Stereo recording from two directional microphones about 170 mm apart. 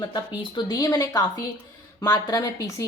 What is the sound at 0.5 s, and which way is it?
A woman's voice, 20° left (ahead or behind).